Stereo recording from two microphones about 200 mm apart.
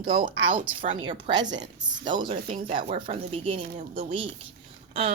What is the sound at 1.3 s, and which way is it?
Speech, 20° right (ahead or behind).